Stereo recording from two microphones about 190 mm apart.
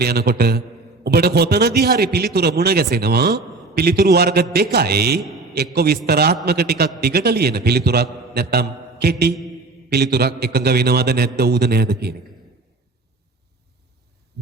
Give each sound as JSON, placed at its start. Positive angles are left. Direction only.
{"t": 0.0, "sound": "a man's voice", "side_deg": -60}
{"t": 8.3, "sound": "mantra", "side_deg": -55}
{"t": 9.9, "sound": "a man's voice", "side_deg": -60}